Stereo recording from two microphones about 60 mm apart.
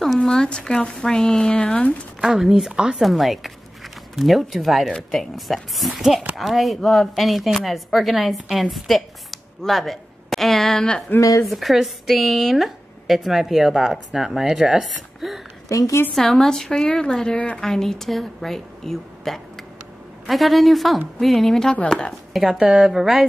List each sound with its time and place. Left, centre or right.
0.0 s speech: centre
2.2 s speech: centre
3.0 s speech: centre
11.1 s speech: left
11.4 s speech: centre
15.7 s a woman's voice: left
16.2 s a woman's voice: centre
17.6 s speech: centre
22.3 s speech: centre